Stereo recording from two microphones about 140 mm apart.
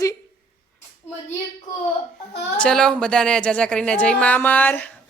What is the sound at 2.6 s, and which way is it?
A woman's voice, 5° left (ahead or behind).